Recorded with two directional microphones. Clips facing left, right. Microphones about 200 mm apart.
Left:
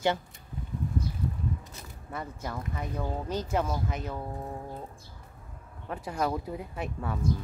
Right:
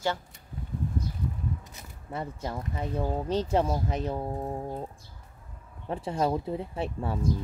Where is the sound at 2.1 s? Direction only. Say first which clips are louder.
Right 3 dB; 25° right (ahead or behind).